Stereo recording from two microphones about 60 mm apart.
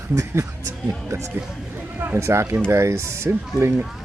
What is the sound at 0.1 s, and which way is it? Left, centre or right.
Speech, right.